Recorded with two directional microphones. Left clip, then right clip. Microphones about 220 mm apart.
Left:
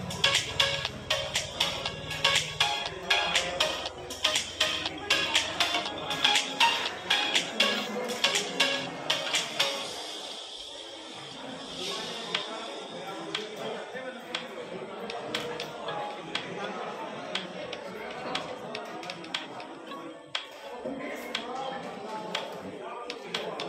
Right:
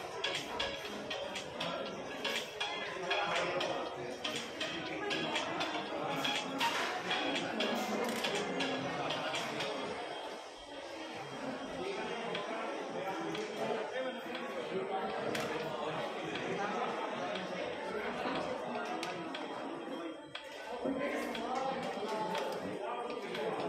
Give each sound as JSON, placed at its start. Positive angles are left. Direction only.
{"t": 0.2, "sound": "music", "side_deg": 30}